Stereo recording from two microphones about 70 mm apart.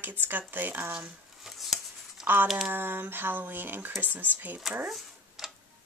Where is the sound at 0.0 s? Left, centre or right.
Right.